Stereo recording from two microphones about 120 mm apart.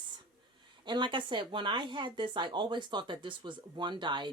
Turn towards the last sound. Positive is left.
turn(degrees=-40)  # may be behind; listen again after turning